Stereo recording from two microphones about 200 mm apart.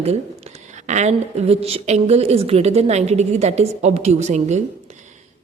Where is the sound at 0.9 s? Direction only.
35° right (ahead or behind).